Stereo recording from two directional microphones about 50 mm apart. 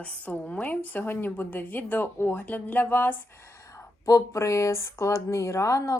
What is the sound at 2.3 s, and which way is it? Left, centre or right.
Speech, left.